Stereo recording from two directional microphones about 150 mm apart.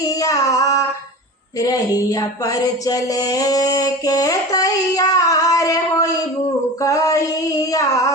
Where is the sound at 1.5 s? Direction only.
25° left (ahead or behind).